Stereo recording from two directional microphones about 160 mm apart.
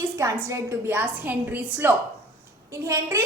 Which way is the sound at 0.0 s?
15° right (ahead or behind).